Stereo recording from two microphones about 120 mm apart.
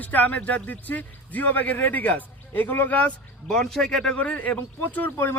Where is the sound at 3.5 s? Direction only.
5° left (ahead or behind).